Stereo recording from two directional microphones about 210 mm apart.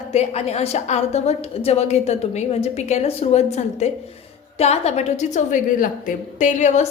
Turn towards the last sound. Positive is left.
turn(degrees=35)  # may be behind; listen again after turning